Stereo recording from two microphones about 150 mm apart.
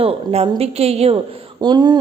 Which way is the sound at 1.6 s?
25° right (ahead or behind).